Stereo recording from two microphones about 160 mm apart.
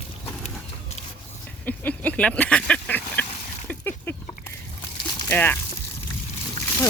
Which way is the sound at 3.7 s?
10° left (ahead or behind).